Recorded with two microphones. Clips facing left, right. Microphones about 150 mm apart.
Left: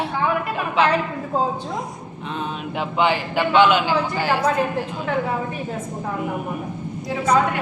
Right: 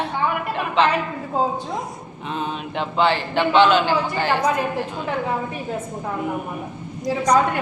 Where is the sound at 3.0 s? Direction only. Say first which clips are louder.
Right 1 dB; 10° left (ahead or behind).